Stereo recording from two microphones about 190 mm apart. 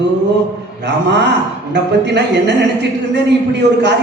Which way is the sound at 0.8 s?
65° right (ahead or behind).